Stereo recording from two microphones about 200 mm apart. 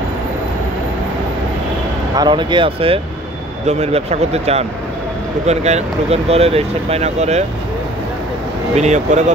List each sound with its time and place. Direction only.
2.1 s speech: 25° right (ahead or behind)
8.7 s speech: 35° right (ahead or behind)